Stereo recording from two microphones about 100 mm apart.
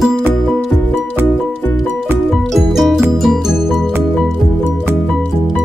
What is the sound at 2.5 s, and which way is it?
Music, 5° right (ahead or behind).